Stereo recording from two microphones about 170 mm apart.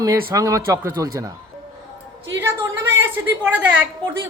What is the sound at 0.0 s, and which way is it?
Speech, 20° right (ahead or behind).